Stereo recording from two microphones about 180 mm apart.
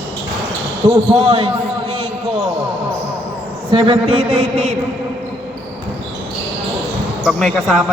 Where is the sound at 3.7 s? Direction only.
30° right (ahead or behind).